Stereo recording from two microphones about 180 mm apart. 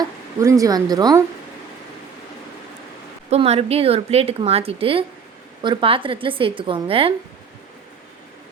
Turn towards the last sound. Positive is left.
turn(degrees=-30)  # may be behind; listen again after turning